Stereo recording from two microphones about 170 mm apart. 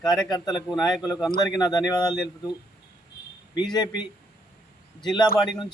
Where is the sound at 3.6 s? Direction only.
25° left (ahead or behind).